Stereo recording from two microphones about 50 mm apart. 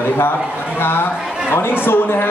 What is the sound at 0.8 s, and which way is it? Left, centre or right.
Speech, left.